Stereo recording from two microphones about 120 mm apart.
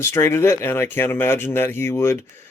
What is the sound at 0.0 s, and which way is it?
Speech, 20° left (ahead or behind).